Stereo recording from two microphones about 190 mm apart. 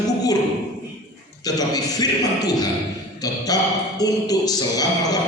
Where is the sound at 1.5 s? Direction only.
20° left (ahead or behind).